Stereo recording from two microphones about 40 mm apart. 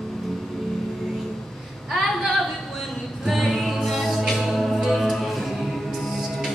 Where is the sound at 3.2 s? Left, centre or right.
Centre.